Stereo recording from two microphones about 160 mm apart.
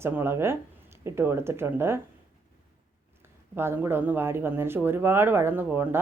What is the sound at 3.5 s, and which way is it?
Speech, 15° right (ahead or behind).